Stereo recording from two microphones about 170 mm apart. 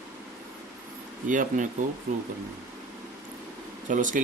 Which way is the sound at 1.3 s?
50° right (ahead or behind).